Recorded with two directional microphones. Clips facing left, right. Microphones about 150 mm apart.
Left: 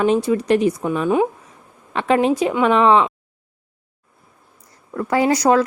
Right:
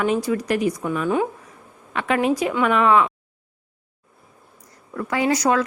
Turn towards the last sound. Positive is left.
turn(degrees=35)  # may be behind; listen again after turning